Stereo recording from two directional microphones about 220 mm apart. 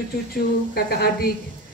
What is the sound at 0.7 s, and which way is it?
Speech, 45° left (ahead or behind).